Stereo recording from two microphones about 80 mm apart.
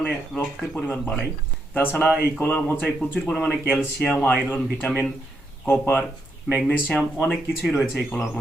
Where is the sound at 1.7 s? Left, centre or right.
Left.